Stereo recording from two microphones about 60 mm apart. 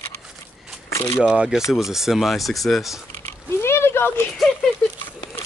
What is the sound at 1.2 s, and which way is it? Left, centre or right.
Speech, centre.